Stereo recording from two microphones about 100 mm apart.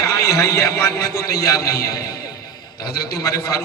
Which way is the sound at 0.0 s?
30° left (ahead or behind).